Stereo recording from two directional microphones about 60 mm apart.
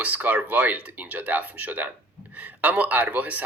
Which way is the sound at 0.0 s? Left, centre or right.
Right.